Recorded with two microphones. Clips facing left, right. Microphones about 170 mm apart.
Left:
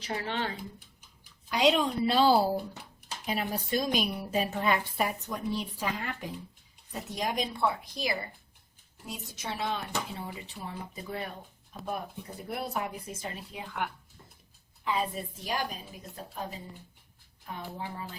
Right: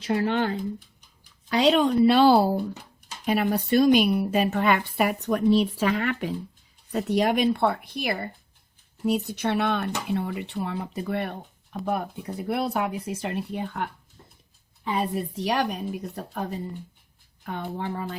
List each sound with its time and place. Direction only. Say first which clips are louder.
1.5 s a woman's voice: right 6 dB; 70° right (ahead or behind)
14.8 s a woman's voice: right 5 dB; 65° right (ahead or behind)